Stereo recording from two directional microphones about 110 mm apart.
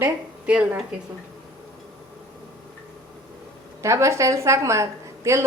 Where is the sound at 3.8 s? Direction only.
25° right (ahead or behind).